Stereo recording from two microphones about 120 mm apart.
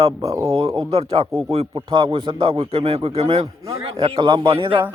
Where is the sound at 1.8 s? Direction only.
45° right (ahead or behind).